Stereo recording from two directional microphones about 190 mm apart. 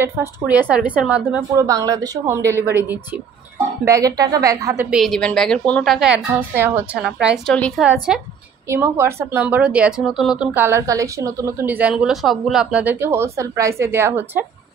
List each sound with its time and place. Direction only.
0.0 s speech: 10° right (ahead or behind)
1.5 s speech: 20° right (ahead or behind)
3.8 s speech: 20° right (ahead or behind)
4.9 s a woman's voice: centre (ahead or behind)